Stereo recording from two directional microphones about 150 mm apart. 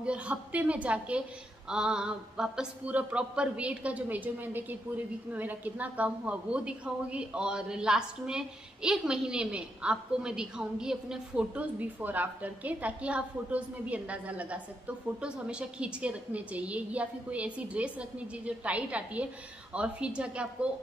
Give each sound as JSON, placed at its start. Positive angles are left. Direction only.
{"t": 0.0, "sound": "a woman's voice", "side_deg": -5}